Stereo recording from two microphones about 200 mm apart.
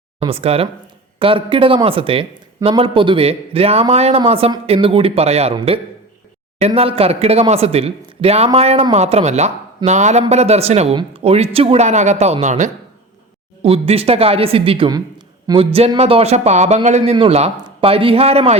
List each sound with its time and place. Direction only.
0.2 s speech: 30° right (ahead or behind)